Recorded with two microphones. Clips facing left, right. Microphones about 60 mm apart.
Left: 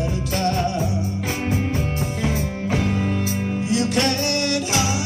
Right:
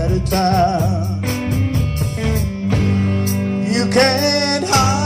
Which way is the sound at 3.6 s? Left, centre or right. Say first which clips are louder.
Right 6 dB; right.